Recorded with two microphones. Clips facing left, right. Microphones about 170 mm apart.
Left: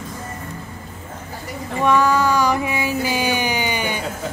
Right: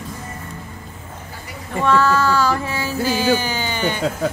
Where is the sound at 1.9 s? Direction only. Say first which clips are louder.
Even; 15° left (ahead or behind).